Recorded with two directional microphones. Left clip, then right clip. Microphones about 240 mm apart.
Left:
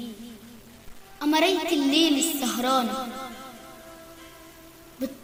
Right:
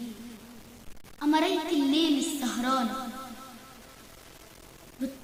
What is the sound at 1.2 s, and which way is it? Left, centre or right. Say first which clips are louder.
A woman's voice: left 4 dB; left.